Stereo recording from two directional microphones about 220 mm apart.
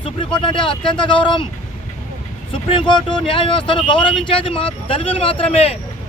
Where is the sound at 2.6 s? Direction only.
20° left (ahead or behind).